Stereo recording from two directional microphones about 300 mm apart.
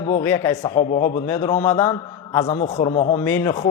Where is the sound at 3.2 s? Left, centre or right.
Centre.